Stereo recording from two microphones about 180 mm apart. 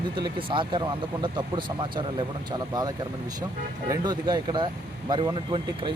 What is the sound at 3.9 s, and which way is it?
Speech, 25° right (ahead or behind).